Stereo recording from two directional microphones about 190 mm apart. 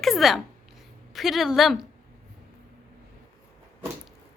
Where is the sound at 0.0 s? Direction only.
Centre (ahead or behind).